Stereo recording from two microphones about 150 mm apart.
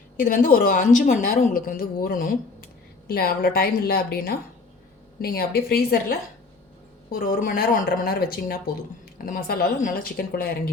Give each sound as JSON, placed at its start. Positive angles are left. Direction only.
{"t": 0.2, "sound": "a woman's voice", "side_deg": 60}
{"t": 7.1, "sound": "a woman's voice", "side_deg": 80}